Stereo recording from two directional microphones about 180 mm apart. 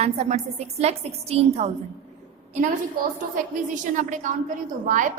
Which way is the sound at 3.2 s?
50° right (ahead or behind).